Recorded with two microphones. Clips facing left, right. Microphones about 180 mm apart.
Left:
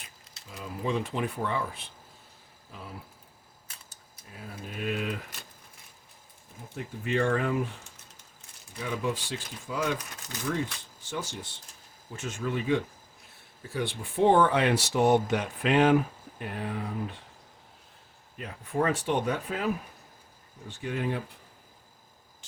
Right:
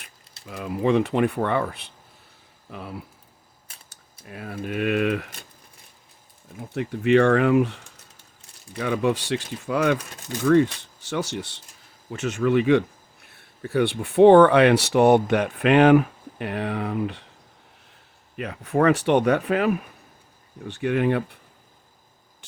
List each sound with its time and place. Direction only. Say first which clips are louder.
0.4 s speech: right 10 dB; 65° right (ahead or behind)
6.7 s speech: right 11 dB; 80° right
8.8 s speech: right 8 dB; 70° right (ahead or behind)
11.0 s speech: right 9 dB; 80° right
13.2 s speech: right 11 dB; 65° right (ahead or behind); by 17.2 s 80° right
18.3 s speech: right 7 dB; 80° right; by 21.3 s 65° right (ahead or behind)